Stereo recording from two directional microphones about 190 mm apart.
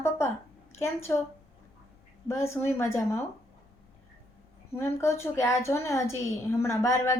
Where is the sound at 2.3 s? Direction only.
15° left (ahead or behind).